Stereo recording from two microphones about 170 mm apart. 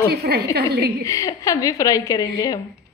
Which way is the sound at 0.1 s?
70° right (ahead or behind).